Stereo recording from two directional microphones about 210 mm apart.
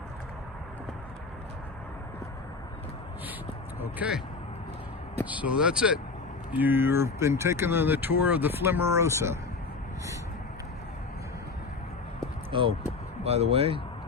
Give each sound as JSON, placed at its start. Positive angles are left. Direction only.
{"t": 3.9, "sound": "speech", "side_deg": -5}
{"t": 5.2, "sound": "speech", "side_deg": -5}
{"t": 12.5, "sound": "speech", "side_deg": -25}